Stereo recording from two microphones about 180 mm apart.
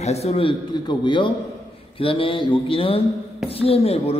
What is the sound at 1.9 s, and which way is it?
Mantra, 30° left (ahead or behind).